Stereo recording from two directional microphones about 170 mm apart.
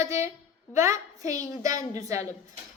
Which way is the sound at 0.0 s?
15° right (ahead or behind).